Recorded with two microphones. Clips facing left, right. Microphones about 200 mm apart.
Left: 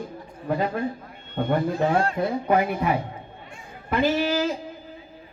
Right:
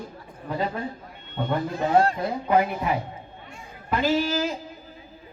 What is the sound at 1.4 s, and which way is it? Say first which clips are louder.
Speech: left 4 dB; 55° left (ahead or behind).